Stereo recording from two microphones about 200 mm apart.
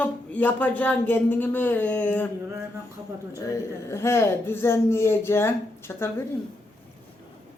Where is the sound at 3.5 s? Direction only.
15° left (ahead or behind).